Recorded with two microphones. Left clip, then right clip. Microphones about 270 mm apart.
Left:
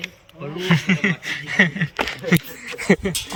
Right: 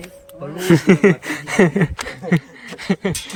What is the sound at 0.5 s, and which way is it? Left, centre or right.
Speech, right.